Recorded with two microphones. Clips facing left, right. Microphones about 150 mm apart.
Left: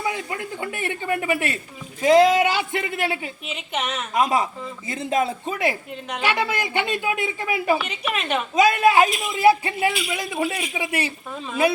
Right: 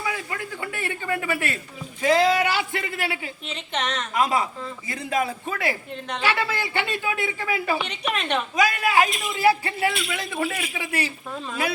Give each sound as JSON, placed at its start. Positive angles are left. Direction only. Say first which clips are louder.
{"t": 0.0, "sound": "speech", "louder": "left 3 dB", "side_deg": 20}
{"t": 3.4, "sound": "a woman's voice", "louder": "right 3 dB", "side_deg": 10}
{"t": 4.1, "sound": "speech", "louder": "left 3 dB", "side_deg": 20}
{"t": 5.9, "sound": "a woman's voice", "louder": "left 1 dB", "side_deg": 10}
{"t": 7.9, "sound": "a woman's voice", "louder": "left 1 dB", "side_deg": 5}
{"t": 8.5, "sound": "speech", "louder": "left 5 dB", "side_deg": 25}
{"t": 9.0, "sound": "a woman's voice", "louder": "left 3 dB", "side_deg": 0}
{"t": 9.4, "sound": "a woman's voice", "louder": "left 3 dB", "side_deg": 20}